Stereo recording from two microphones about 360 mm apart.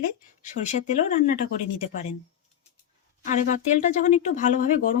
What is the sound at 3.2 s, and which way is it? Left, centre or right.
Speech, left.